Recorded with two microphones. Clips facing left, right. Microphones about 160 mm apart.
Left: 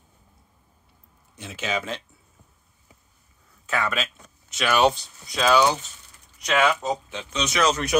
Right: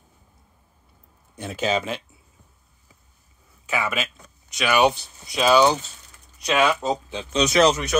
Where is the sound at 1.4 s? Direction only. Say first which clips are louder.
Right 7 dB; 50° right (ahead or behind).